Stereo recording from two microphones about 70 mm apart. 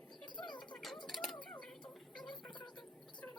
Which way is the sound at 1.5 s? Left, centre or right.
Centre.